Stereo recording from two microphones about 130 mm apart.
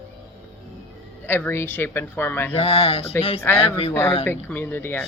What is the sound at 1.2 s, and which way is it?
Speech, 15° left (ahead or behind).